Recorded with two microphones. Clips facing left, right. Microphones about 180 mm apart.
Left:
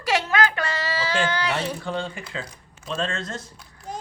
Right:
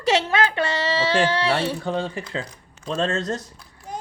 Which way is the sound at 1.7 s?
35° right (ahead or behind).